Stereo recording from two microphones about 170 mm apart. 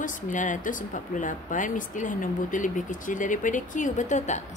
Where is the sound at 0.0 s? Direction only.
50° left (ahead or behind).